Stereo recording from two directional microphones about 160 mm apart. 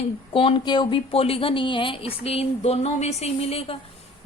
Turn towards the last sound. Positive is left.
turn(degrees=40)  # may be behind; listen again after turning